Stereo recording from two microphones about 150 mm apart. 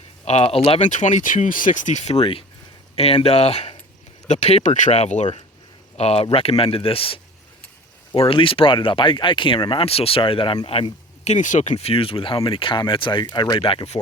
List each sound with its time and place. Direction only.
0.3 s speech: 45° left (ahead or behind)